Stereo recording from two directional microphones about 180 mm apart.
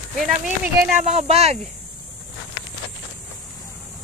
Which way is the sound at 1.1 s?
35° right (ahead or behind).